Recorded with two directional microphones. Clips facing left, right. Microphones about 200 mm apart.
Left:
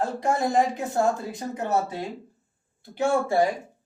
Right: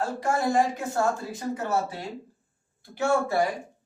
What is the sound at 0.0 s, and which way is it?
Speech, 20° left (ahead or behind).